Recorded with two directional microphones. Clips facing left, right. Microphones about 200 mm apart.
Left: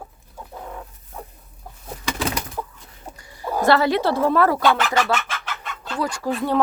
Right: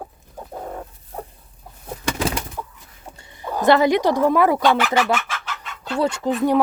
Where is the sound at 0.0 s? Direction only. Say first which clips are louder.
Right 4 dB; 40° right (ahead or behind).